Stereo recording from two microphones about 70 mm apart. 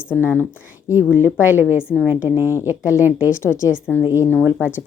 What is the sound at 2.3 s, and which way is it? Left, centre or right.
Speech, right.